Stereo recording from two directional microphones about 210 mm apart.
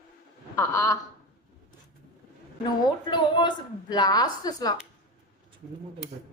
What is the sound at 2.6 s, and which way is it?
A woman's voice, 20° left (ahead or behind).